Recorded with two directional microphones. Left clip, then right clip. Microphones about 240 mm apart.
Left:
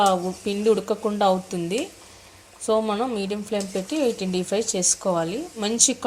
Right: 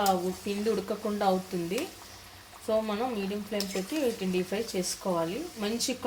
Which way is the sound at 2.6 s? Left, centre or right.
Left.